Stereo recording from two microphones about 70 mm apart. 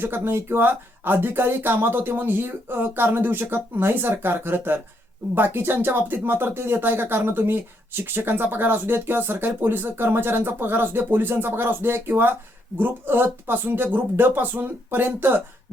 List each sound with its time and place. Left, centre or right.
0.0 s speech: right